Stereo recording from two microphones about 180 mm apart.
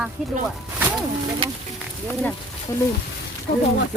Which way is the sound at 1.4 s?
30° right (ahead or behind).